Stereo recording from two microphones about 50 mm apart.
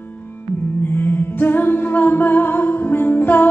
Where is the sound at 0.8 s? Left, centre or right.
Left.